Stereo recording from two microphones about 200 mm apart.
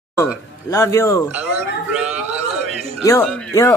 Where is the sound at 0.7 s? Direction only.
15° left (ahead or behind).